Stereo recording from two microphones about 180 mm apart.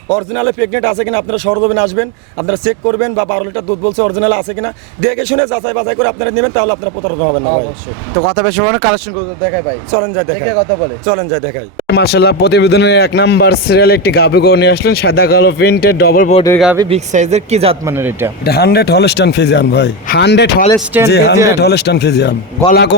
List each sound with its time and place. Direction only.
0.1 s speech: 5° left (ahead or behind)
11.9 s speech: 65° left (ahead or behind)
16.9 s speech: 40° right (ahead or behind)
17.8 s speech: 15° right (ahead or behind)
18.4 s speech: 60° left (ahead or behind)
20.7 s speech: 10° right (ahead or behind)
21.1 s speech: 70° left (ahead or behind)